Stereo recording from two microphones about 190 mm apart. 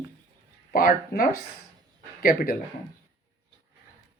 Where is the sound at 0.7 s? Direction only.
50° left (ahead or behind).